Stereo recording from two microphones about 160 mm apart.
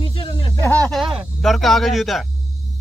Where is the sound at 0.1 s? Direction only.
35° left (ahead or behind).